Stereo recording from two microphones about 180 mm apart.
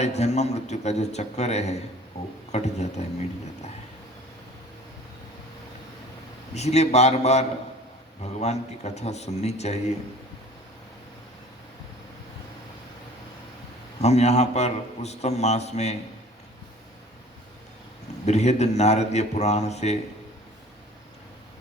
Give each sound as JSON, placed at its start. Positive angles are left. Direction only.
{"t": 0.0, "sound": "a man's voice", "side_deg": 40}
{"t": 2.2, "sound": "speech", "side_deg": 20}
{"t": 2.5, "sound": "a man's voice", "side_deg": 40}
{"t": 6.5, "sound": "a man's voice", "side_deg": 35}
{"t": 14.0, "sound": "a man's voice", "side_deg": 35}
{"t": 18.3, "sound": "a man's voice", "side_deg": 40}